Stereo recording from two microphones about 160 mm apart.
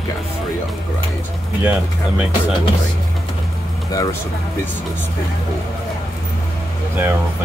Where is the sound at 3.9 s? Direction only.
20° left (ahead or behind).